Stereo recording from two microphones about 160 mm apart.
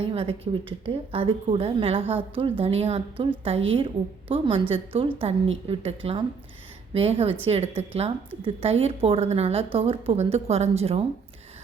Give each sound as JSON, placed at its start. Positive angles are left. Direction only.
{"t": 0.0, "sound": "a woman's voice", "side_deg": -35}